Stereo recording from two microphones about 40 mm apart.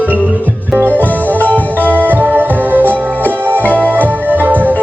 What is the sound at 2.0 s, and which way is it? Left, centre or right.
Music, right.